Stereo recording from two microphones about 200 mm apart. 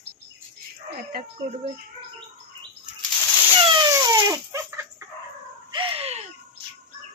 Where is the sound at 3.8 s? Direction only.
20° right (ahead or behind).